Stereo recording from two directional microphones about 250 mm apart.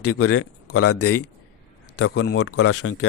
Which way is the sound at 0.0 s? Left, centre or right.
Left.